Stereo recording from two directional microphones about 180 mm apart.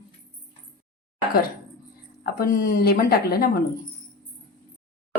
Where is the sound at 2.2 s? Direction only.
55° left (ahead or behind).